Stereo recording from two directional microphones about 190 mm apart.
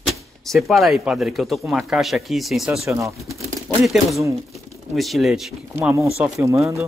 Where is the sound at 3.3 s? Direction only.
Centre (ahead or behind).